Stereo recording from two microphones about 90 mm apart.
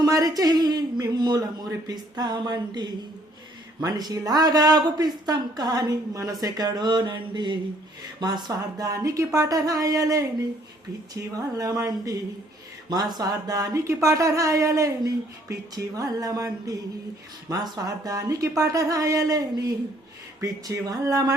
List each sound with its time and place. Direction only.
0.0 s speech: 40° right (ahead or behind)